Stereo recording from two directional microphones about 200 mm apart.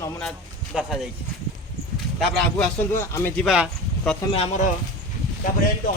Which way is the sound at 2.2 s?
5° left (ahead or behind).